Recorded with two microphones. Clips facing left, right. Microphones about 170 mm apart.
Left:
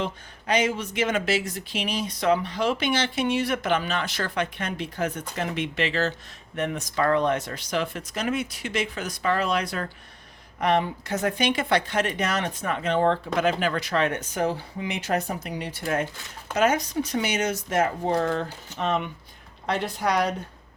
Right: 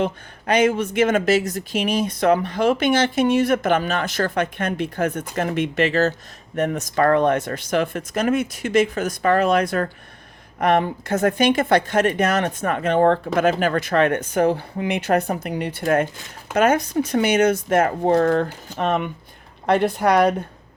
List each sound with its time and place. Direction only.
0.0 s speech: 55° right (ahead or behind)